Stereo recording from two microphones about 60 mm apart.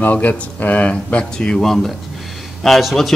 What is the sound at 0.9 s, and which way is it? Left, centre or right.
Speech, centre.